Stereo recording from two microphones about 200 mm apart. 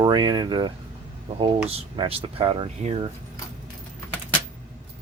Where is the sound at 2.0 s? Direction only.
25° right (ahead or behind).